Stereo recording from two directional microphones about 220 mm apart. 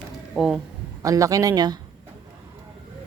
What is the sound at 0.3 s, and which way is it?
Speech, centre (ahead or behind).